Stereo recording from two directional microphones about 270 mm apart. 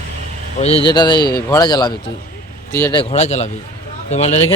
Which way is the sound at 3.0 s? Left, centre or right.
Left.